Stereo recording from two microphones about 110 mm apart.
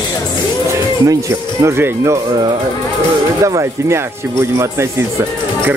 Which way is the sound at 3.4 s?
30° right (ahead or behind).